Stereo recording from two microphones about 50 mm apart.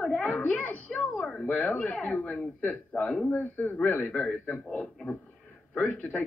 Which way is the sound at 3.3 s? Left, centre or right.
Left.